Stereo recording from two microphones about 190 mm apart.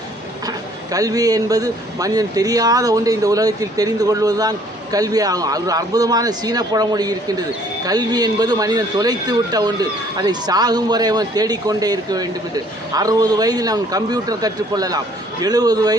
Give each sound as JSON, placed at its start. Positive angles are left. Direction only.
{"t": 0.4, "sound": "a man's voice", "side_deg": -20}